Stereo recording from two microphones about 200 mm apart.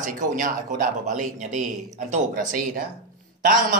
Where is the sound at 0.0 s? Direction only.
40° right (ahead or behind).